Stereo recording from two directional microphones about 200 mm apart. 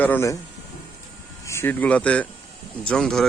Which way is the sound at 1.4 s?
15° left (ahead or behind).